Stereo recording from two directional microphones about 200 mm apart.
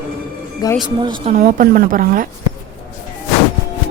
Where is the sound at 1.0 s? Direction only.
25° right (ahead or behind).